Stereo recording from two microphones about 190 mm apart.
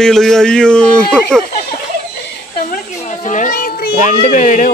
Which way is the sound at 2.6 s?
45° left (ahead or behind).